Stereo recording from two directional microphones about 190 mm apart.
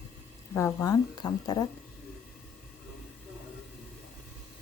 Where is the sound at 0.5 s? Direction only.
15° left (ahead or behind).